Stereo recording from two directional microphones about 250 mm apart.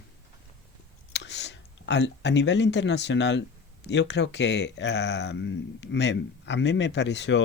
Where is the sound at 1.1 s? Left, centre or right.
Left.